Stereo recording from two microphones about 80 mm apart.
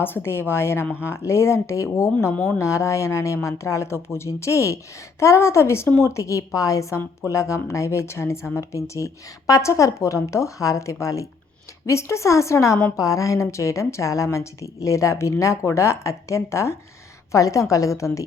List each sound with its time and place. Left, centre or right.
0.0 s a woman's voice: left
2.3 s speech: centre
2.6 s a woman's voice: left